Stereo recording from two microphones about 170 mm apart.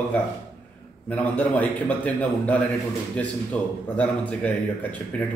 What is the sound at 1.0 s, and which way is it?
A man's voice, 10° left (ahead or behind).